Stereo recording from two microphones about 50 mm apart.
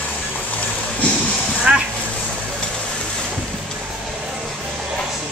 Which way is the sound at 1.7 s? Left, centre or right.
Right.